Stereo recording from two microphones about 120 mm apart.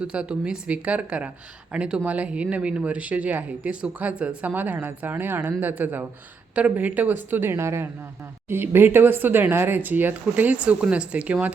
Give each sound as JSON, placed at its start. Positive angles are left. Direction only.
{"t": 0.0, "sound": "speech", "side_deg": -10}